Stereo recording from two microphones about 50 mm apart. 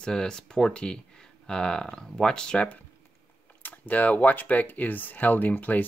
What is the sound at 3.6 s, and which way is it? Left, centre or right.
Speech, left.